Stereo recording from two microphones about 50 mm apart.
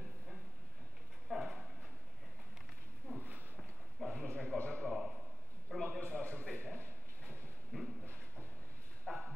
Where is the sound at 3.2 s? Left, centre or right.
Right.